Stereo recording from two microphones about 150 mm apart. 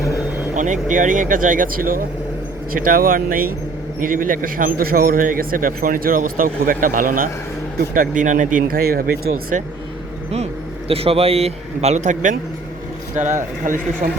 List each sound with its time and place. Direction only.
0.5 s a man's voice: 60° right (ahead or behind); by 9.6 s 85° right
10.3 s a man's voice: 45° right (ahead or behind); by 14.1 s 60° right (ahead or behind)